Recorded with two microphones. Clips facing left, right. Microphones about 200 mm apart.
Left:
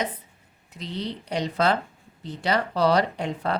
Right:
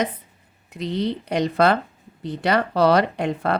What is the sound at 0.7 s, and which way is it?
Speech, 60° right (ahead or behind).